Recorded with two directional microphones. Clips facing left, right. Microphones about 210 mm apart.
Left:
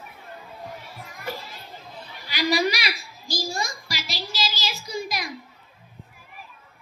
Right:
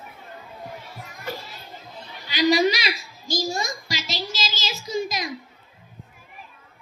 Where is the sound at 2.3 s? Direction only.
25° right (ahead or behind).